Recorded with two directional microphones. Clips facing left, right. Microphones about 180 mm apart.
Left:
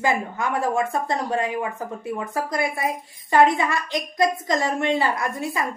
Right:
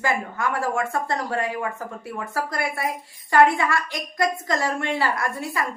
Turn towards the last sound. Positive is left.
turn(degrees=20)  # may be behind; listen again after turning